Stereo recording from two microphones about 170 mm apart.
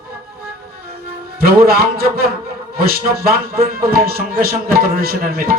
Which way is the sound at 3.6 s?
60° right (ahead or behind).